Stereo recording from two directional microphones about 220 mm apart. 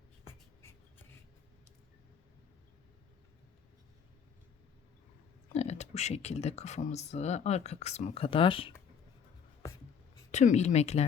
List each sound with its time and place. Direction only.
5.5 s speech: 30° left (ahead or behind)
10.3 s speech: 30° left (ahead or behind)